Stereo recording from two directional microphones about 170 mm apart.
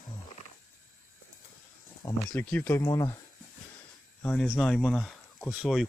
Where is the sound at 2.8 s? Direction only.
25° left (ahead or behind).